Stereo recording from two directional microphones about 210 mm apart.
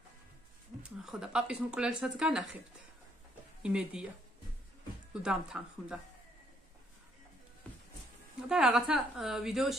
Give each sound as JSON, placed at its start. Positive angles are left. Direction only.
{"t": 0.8, "sound": "speech", "side_deg": -5}
{"t": 3.6, "sound": "speech", "side_deg": -5}
{"t": 5.2, "sound": "speech", "side_deg": -5}
{"t": 8.5, "sound": "speech", "side_deg": -5}